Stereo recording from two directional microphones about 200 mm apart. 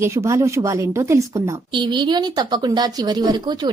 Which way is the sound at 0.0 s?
15° right (ahead or behind).